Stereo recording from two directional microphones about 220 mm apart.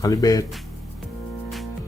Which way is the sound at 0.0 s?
15° left (ahead or behind).